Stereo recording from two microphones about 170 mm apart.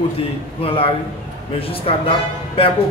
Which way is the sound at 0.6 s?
35° left (ahead or behind).